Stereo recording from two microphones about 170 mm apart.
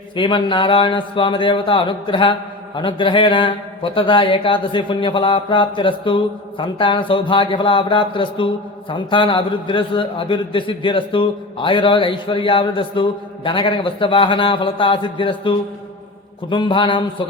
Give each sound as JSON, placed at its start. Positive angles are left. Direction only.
{"t": 0.2, "sound": "a man's voice", "side_deg": 30}